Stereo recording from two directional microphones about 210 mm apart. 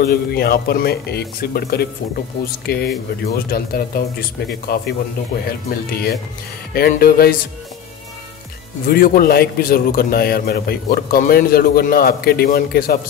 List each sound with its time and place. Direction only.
0.0 s a man's voice: 45° left (ahead or behind)
8.8 s a man's voice: 45° left (ahead or behind)